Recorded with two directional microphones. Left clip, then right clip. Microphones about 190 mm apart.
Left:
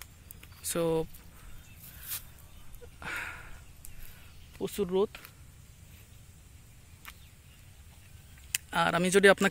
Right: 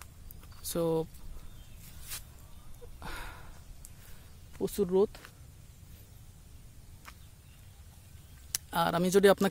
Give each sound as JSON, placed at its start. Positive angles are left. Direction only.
{"t": 0.6, "sound": "speech", "side_deg": 0}
{"t": 3.0, "sound": "a sound", "side_deg": -10}
{"t": 4.6, "sound": "speech", "side_deg": -25}
{"t": 8.5, "sound": "speech", "side_deg": -15}